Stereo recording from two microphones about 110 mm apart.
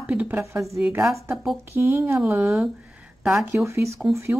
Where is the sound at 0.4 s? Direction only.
25° right (ahead or behind).